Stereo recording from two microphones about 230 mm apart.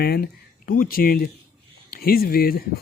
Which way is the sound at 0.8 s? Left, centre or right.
Left.